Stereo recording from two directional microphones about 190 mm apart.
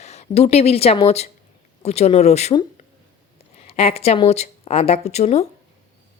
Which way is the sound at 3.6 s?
30° left (ahead or behind).